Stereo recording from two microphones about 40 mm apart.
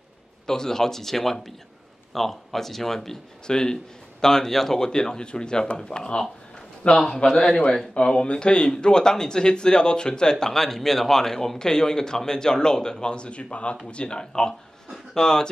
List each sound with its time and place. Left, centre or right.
0.5 s speech: centre
10.4 s speech: centre